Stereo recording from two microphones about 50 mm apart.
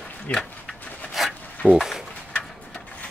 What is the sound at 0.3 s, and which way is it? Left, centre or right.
Speech, left.